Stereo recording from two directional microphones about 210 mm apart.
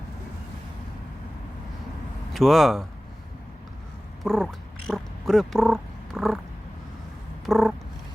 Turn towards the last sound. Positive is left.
turn(degrees=0)  # may be behind; listen again after turning